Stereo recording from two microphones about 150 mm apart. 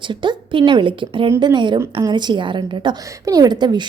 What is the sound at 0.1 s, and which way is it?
A woman's voice, 30° right (ahead or behind).